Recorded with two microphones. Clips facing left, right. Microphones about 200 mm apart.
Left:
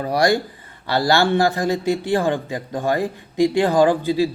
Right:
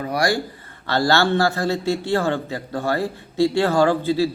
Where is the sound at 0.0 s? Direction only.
25° left (ahead or behind).